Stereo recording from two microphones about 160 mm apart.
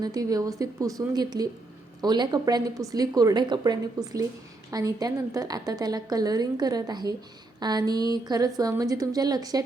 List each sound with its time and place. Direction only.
0.0 s a woman's voice: 25° right (ahead or behind)